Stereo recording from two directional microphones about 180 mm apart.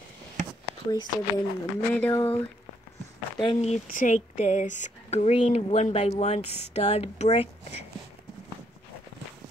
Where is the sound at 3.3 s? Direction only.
30° left (ahead or behind).